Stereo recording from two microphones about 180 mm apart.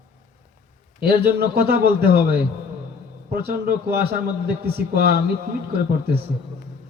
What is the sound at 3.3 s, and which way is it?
A man's voice, 60° right (ahead or behind).